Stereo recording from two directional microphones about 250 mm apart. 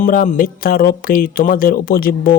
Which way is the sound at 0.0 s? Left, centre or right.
Left.